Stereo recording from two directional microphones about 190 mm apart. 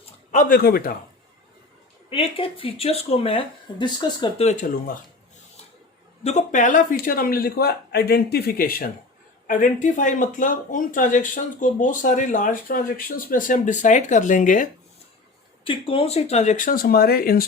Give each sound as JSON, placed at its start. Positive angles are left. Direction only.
{"t": 0.0, "sound": "speech", "side_deg": 40}
{"t": 2.0, "sound": "speech", "side_deg": 30}
{"t": 6.2, "sound": "speech", "side_deg": 40}
{"t": 15.6, "sound": "speech", "side_deg": 30}